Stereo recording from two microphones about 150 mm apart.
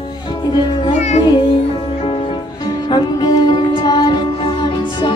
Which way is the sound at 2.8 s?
30° left (ahead or behind).